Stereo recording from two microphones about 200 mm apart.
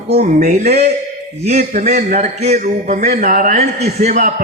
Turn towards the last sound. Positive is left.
turn(degrees=-40)  # may be behind; listen again after turning